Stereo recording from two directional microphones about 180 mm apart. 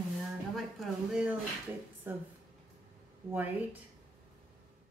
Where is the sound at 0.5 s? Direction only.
Centre (ahead or behind).